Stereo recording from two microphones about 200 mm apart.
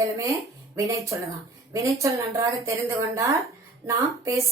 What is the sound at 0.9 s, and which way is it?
A woman's voice, 15° right (ahead or behind).